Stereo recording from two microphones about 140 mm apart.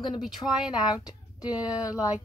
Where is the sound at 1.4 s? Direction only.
10° right (ahead or behind).